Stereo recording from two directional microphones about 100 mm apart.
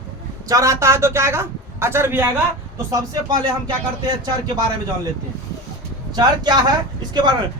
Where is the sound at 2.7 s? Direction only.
35° right (ahead or behind).